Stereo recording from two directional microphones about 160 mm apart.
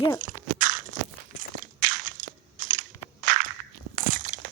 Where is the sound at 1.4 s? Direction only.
55° right (ahead or behind).